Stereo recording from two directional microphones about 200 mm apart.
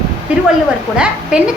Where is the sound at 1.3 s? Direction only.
5° right (ahead or behind).